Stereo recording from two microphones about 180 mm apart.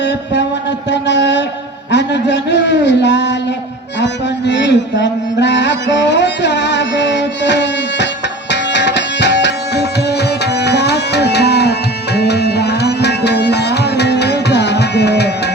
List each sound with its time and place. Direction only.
0.9 s speech: 75° left (ahead or behind)
4.0 s music: 75° left (ahead or behind)
10.6 s tabla: 65° left (ahead or behind)